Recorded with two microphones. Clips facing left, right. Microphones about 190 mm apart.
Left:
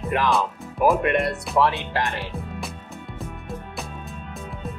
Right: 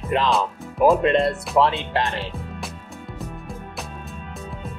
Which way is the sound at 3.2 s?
Centre (ahead or behind).